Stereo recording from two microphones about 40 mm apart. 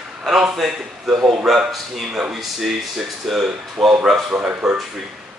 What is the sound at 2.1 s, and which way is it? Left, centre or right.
Speech, centre.